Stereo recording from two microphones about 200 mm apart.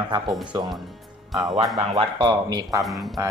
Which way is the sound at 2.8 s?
Centre (ahead or behind).